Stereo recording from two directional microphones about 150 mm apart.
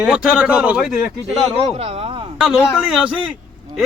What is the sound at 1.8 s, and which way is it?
Speech, 45° right (ahead or behind).